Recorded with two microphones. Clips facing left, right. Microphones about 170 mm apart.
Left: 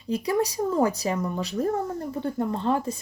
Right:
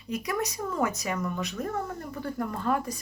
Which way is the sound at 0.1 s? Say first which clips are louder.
Left 6 dB; 30° left (ahead or behind).